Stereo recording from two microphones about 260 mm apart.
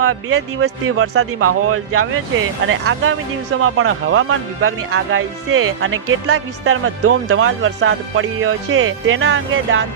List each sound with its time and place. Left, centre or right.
0.0 s speech: right